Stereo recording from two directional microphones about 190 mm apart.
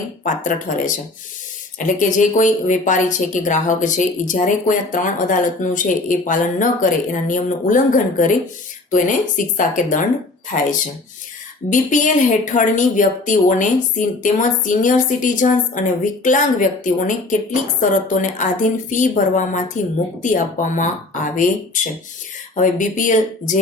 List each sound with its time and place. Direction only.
0.3 s speech: 40° left (ahead or behind)
2.0 s speech: 40° left (ahead or behind)
11.7 s speech: 40° left (ahead or behind)
22.5 s speech: 45° left (ahead or behind)